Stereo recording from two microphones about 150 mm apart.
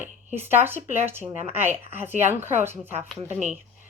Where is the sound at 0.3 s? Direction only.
15° right (ahead or behind).